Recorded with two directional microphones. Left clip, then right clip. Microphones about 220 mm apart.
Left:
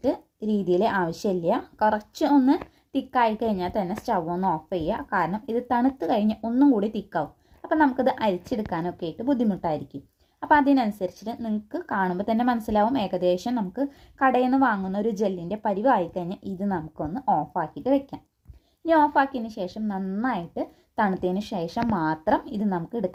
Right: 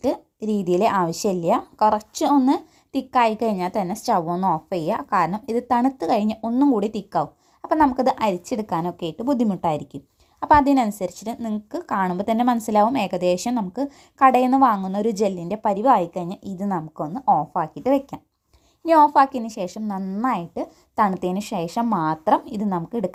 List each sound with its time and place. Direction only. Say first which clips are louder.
0.0 s a woman's voice: right 3 dB; 25° right (ahead or behind)